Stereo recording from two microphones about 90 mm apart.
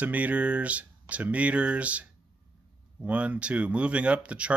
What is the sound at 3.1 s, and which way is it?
Speech, 15° right (ahead or behind).